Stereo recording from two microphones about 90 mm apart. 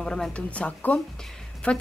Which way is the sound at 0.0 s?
5° left (ahead or behind).